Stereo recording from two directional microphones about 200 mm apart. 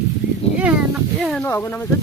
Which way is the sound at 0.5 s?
5° right (ahead or behind).